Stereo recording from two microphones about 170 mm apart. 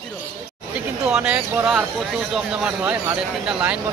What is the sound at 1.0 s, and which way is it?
Speech, 5° right (ahead or behind).